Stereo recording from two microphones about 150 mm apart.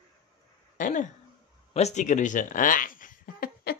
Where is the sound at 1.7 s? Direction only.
45° left (ahead or behind); by 3.7 s 80° left.